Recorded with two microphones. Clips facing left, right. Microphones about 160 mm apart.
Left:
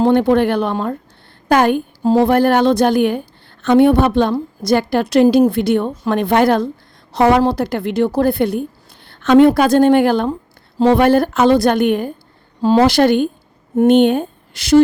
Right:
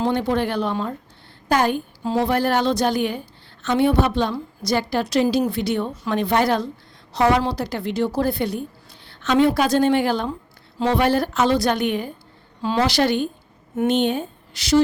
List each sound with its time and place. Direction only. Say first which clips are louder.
0.0 s a woman's voice: left 8 dB; 55° left (ahead or behind)